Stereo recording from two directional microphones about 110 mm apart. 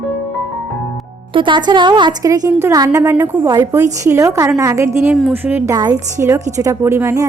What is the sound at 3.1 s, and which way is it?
Speech, 15° right (ahead or behind).